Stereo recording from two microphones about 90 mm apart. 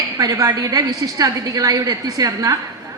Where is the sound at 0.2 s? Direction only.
45° right (ahead or behind).